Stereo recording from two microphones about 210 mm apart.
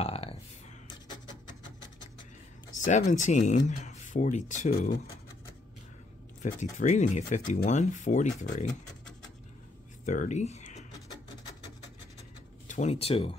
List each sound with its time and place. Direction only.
0.0 s a sound: 25° left (ahead or behind)
2.8 s speech: 35° left (ahead or behind)
6.4 s speech: 35° left (ahead or behind)
10.0 s speech: 35° left (ahead or behind)
12.6 s speech: 35° left (ahead or behind)